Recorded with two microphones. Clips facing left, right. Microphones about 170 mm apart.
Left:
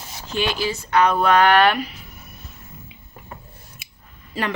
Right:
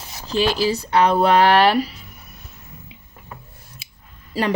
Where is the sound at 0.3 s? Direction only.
35° right (ahead or behind).